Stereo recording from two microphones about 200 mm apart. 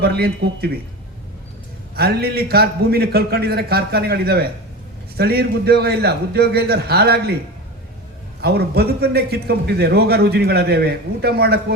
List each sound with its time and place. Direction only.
0.0 s a man's voice: 50° right (ahead or behind)
2.0 s a man's voice: 50° right (ahead or behind)
8.4 s a man's voice: 50° right (ahead or behind)